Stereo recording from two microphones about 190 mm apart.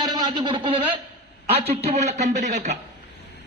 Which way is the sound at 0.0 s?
25° right (ahead or behind).